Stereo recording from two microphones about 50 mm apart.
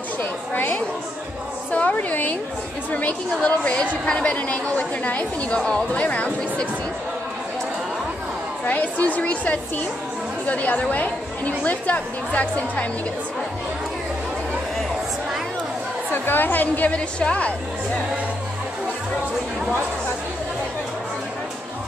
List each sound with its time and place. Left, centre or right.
0.2 s a woman's voice: left
1.7 s a woman's voice: left
4.7 s a woman's voice: left
5.6 s speech: centre
5.9 s a woman's voice: left
8.6 s a woman's voice: left
16.1 s a woman's voice: left
16.9 s a woman's voice: left